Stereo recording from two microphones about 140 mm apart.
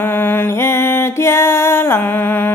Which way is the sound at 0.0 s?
15° left (ahead or behind).